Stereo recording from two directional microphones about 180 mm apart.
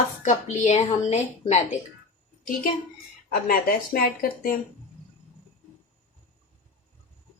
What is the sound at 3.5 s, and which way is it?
Speech, 50° left (ahead or behind).